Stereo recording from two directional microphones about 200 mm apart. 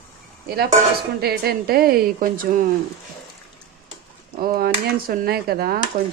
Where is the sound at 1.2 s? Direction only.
50° right (ahead or behind).